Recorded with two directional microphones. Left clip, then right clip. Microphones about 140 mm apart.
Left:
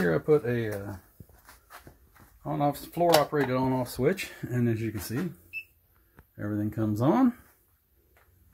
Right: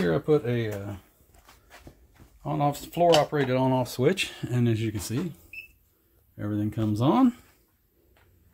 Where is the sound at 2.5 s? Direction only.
25° right (ahead or behind).